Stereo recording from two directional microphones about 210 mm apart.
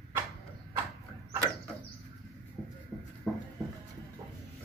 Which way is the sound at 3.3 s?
5° left (ahead or behind).